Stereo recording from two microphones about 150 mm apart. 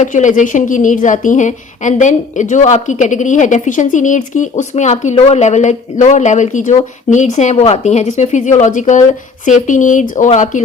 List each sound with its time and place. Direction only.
0.0 s a woman's voice: 55° left (ahead or behind)